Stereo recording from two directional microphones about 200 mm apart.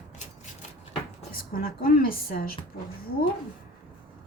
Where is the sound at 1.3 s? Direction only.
50° left (ahead or behind).